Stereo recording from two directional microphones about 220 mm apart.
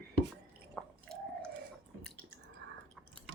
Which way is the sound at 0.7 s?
5° left (ahead or behind).